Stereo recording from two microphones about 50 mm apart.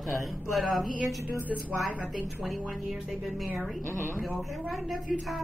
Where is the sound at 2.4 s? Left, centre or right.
Centre.